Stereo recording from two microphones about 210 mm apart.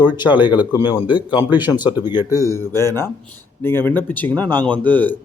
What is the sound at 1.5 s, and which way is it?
Speech, 10° right (ahead or behind).